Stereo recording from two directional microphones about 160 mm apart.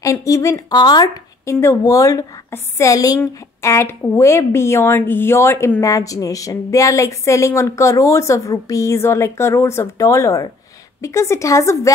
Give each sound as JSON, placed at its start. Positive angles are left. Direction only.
{"t": 0.0, "sound": "a woman's voice", "side_deg": 20}